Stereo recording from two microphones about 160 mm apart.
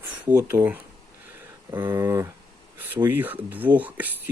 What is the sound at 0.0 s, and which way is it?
Speech, 10° right (ahead or behind).